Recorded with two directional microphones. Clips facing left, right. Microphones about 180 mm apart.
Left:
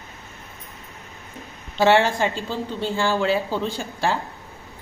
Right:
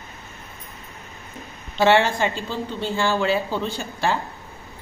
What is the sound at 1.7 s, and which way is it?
Speech, 40° left (ahead or behind).